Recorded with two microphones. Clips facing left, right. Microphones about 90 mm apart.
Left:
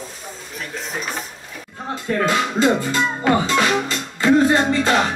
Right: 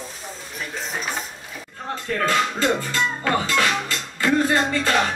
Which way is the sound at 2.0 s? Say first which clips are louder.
Left 2 dB; 15° left (ahead or behind).